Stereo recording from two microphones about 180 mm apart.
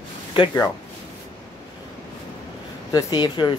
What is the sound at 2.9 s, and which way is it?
Speech, 20° left (ahead or behind).